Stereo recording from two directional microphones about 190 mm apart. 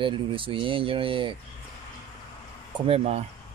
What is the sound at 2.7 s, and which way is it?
Speech, 30° right (ahead or behind).